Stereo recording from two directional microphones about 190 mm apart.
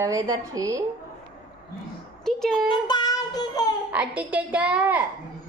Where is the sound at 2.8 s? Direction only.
20° left (ahead or behind).